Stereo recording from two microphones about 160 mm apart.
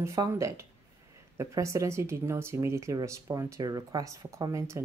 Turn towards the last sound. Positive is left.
turn(degrees=-20)  # may be behind; listen again after turning